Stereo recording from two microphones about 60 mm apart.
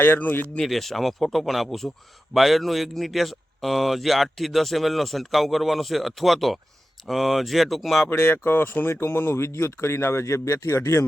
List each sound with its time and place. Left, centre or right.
0.0 s speech: left
0.6 s speech: centre
8.2 s speech: left